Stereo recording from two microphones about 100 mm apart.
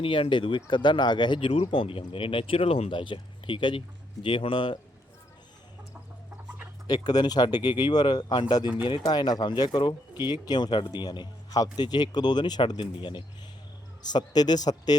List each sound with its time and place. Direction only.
0.0 s a man's voice: 60° left (ahead or behind); by 2.9 s 80° left
2.9 s speech: 55° left (ahead or behind)
6.8 s a man's voice: 45° left (ahead or behind)